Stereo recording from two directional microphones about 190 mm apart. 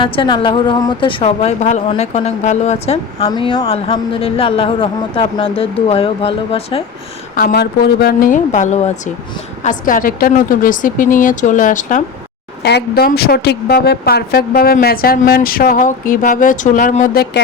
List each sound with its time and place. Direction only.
0.0 s a woman's voice: 25° left (ahead or behind)
7.3 s a woman's voice: 50° left (ahead or behind)
12.6 s a woman's voice: 55° left (ahead or behind)